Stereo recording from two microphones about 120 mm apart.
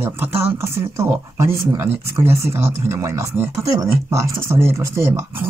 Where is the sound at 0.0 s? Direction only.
20° right (ahead or behind).